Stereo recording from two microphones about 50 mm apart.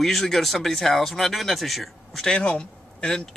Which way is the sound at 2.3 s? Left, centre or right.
Centre.